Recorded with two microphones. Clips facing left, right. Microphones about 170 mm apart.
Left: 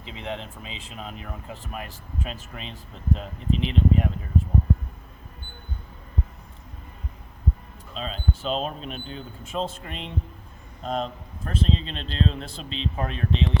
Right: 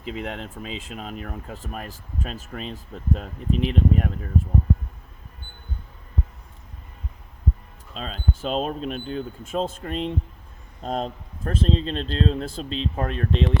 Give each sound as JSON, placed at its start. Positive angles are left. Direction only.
{"t": 0.0, "sound": "speech", "side_deg": -45}
{"t": 7.9, "sound": "speech", "side_deg": -45}